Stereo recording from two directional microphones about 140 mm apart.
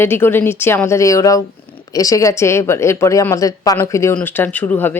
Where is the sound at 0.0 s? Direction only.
15° left (ahead or behind).